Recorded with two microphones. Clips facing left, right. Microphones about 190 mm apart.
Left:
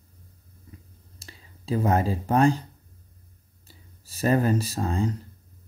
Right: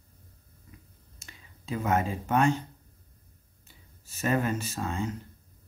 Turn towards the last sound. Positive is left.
turn(degrees=35)  # may be behind; listen again after turning